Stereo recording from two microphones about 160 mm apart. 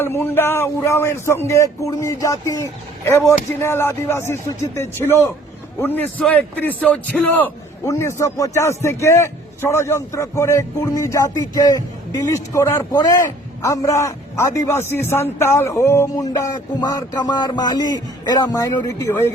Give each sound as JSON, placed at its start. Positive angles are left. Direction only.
{"t": 0.0, "sound": "speech", "side_deg": 15}